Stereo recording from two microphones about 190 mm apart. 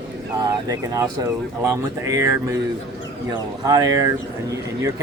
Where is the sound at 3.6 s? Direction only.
20° right (ahead or behind).